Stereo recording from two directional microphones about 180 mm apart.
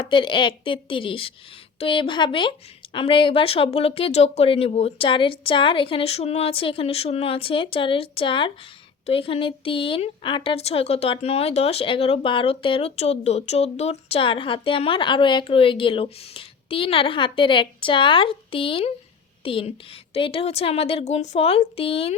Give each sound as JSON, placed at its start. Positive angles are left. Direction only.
{"t": 0.0, "sound": "a woman's voice", "side_deg": 25}